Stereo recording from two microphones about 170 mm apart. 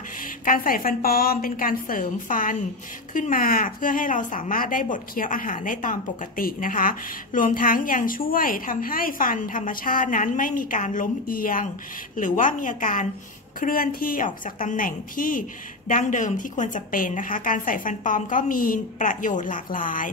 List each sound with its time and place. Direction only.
0.5 s a woman's voice: 55° left (ahead or behind)